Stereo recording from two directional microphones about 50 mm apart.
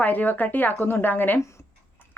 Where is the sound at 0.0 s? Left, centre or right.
Left.